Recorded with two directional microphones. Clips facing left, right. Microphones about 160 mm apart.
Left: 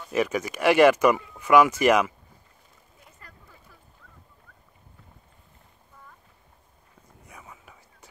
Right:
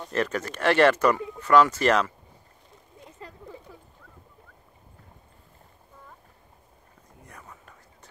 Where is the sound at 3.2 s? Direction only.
25° right (ahead or behind).